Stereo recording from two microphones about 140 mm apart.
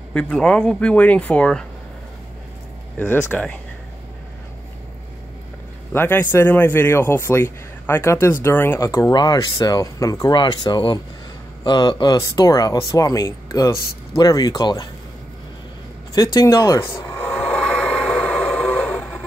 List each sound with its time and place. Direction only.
0.1 s a man's voice: 5° left (ahead or behind)
3.0 s a man's voice: 10° left (ahead or behind)
5.9 s a man's voice: 15° left (ahead or behind)
16.2 s speech: 25° left (ahead or behind)
17.4 s a sound: 5° left (ahead or behind)